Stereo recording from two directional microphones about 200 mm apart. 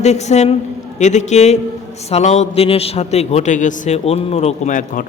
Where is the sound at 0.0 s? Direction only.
35° left (ahead or behind).